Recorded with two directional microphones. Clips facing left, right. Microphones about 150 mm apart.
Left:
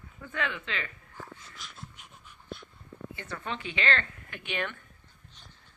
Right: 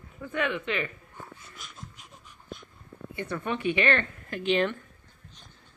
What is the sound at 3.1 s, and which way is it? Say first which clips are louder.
Speech: right 7 dB; 20° right (ahead or behind).